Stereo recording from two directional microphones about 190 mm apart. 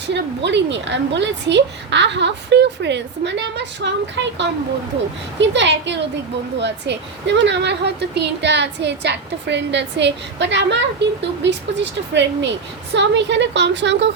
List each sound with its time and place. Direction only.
0.1 s a woman's voice: 65° right (ahead or behind)